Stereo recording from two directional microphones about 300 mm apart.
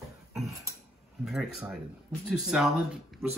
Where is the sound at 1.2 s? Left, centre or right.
Centre.